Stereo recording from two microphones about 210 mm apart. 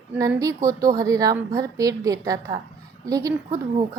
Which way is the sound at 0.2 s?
15° right (ahead or behind).